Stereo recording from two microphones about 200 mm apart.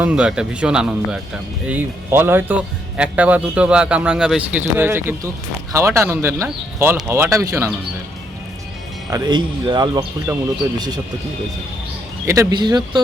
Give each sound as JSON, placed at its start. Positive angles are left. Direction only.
{"t": 0.0, "sound": "a man's voice", "side_deg": -5}
{"t": 9.0, "sound": "speech", "side_deg": -20}
{"t": 12.2, "sound": "speech", "side_deg": -15}